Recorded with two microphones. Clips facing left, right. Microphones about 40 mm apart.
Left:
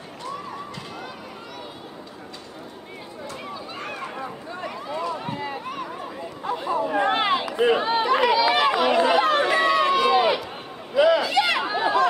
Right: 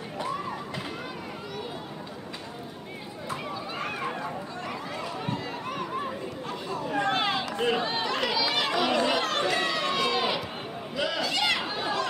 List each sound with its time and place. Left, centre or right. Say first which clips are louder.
3.4 s run: left 1 dB; centre
4.6 s a sound: left 9 dB; centre
6.4 s chatter: left 11 dB; centre
11.0 s run: left 10 dB; centre